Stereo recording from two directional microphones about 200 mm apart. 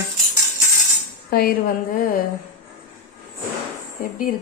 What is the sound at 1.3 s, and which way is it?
Speech, 50° left (ahead or behind).